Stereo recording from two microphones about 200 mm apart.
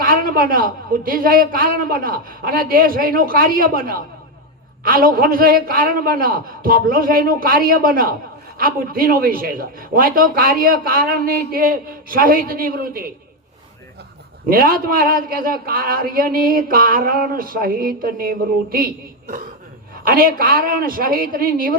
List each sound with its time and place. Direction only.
0.0 s a man's voice: 45° right (ahead or behind)
14.5 s a man's voice: 45° right (ahead or behind)
20.1 s a man's voice: 45° right (ahead or behind)